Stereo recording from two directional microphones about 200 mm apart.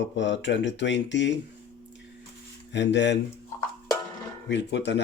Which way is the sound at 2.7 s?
60° left (ahead or behind).